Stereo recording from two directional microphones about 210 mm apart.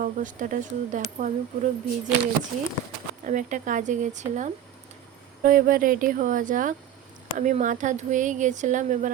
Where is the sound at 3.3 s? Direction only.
35° right (ahead or behind).